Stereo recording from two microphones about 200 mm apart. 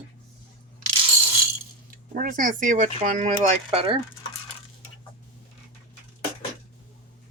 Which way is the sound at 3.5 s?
30° right (ahead or behind).